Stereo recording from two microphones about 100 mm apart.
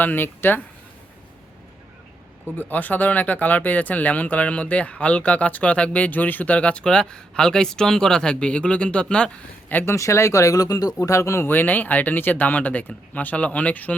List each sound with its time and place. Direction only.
0.0 s speech: 20° left (ahead or behind)
2.6 s speech: 20° left (ahead or behind)
9.9 s speech: 30° left (ahead or behind); by 13.9 s 15° left (ahead or behind)